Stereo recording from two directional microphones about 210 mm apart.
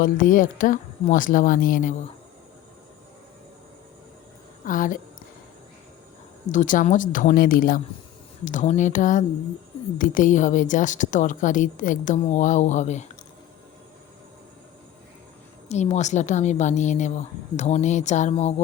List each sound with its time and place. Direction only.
0.0 s a woman's voice: 40° left (ahead or behind)
4.6 s a woman's voice: 40° left (ahead or behind)
6.5 s a woman's voice: 40° left (ahead or behind)
15.7 s a woman's voice: 35° left (ahead or behind)